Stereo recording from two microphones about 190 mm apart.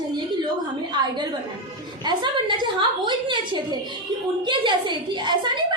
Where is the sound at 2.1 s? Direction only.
25° right (ahead or behind).